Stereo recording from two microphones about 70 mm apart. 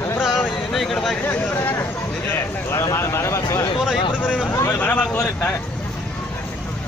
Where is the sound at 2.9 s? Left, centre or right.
Left.